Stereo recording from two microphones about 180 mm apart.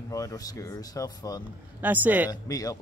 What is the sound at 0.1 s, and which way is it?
Speech, 20° left (ahead or behind).